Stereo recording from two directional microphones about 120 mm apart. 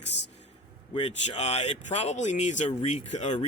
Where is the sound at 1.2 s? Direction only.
60° left (ahead or behind).